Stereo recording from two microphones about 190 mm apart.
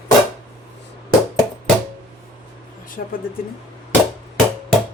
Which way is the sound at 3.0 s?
50° left (ahead or behind).